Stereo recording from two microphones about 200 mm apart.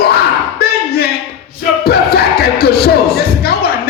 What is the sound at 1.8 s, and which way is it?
Music, 50° left (ahead or behind).